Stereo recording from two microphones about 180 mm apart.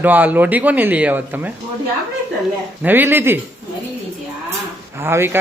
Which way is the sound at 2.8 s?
10° right (ahead or behind).